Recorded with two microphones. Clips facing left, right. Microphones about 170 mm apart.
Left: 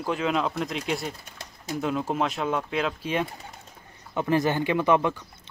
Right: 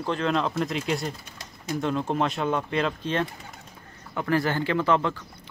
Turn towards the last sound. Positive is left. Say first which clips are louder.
# left 2 dB
turn(degrees=15)  # may be behind; listen again after turning